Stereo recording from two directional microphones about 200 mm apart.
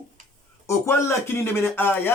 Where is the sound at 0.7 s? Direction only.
15° left (ahead or behind).